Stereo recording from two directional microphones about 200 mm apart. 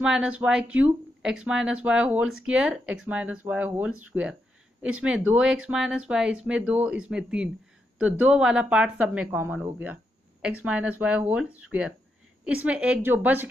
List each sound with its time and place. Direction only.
0.0 s speech: 5° right (ahead or behind)
12.6 s speech: 5° right (ahead or behind)